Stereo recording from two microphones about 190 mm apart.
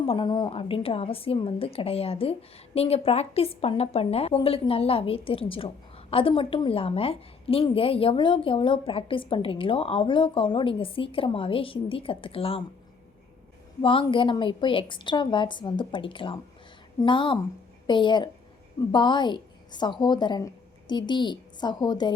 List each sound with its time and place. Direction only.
0.0 s a woman's voice: 25° left (ahead or behind)
13.8 s a woman's voice: 25° left (ahead or behind)